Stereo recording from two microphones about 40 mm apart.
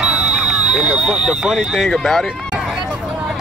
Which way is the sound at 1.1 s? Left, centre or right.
Right.